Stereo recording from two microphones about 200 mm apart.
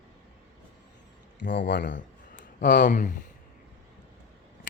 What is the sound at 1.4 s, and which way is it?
Speech, 60° left (ahead or behind).